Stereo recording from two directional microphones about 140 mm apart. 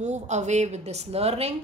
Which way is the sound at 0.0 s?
55° right (ahead or behind).